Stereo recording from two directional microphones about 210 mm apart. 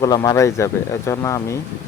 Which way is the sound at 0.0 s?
15° left (ahead or behind).